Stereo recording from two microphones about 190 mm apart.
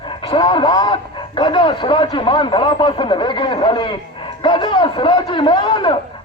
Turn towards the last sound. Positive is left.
turn(degrees=25)  # may be behind; listen again after turning